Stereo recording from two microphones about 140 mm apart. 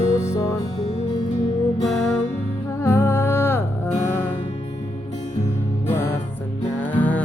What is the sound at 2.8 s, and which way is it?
Music, 15° left (ahead or behind).